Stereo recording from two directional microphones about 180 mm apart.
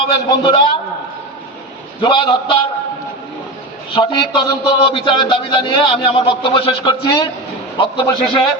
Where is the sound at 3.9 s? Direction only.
30° left (ahead or behind).